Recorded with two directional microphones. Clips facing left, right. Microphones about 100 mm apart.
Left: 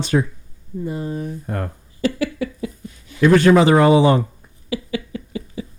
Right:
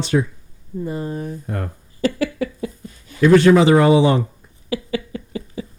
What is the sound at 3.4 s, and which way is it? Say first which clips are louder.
Speech: even; 45° left (ahead or behind).